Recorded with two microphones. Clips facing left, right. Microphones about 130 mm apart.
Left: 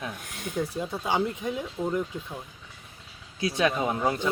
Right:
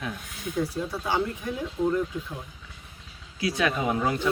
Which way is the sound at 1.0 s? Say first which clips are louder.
Left 1 dB; 20° left (ahead or behind).